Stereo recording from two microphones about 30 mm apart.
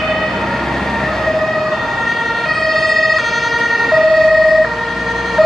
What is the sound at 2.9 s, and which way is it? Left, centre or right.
Emergency vehicle, centre.